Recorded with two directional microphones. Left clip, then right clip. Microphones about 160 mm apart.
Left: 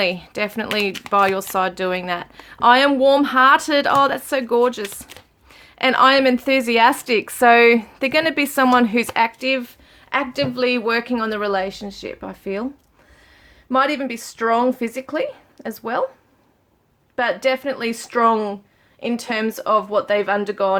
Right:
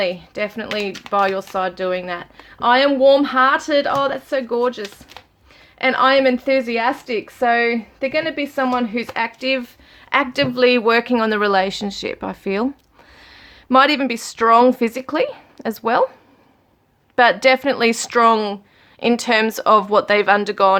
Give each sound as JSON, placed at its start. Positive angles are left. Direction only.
{"t": 0.0, "sound": "speech", "side_deg": 15}
{"t": 9.0, "sound": "speech", "side_deg": 10}
{"t": 10.1, "sound": "a woman's voice", "side_deg": -15}
{"t": 13.7, "sound": "a woman's voice", "side_deg": -25}
{"t": 17.2, "sound": "a woman's voice", "side_deg": -25}